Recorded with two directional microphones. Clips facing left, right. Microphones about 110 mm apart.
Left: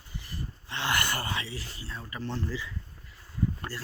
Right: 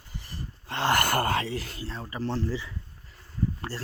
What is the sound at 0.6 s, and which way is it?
Speech, 40° right (ahead or behind).